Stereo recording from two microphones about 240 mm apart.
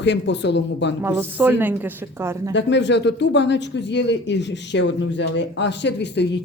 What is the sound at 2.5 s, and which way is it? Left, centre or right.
Speech, left.